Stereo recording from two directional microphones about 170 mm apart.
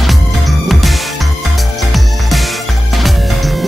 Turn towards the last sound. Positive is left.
turn(degrees=0)  # may be behind; listen again after turning